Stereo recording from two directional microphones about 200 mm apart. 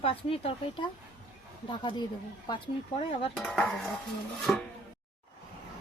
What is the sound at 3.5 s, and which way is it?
Dishes, centre (ahead or behind).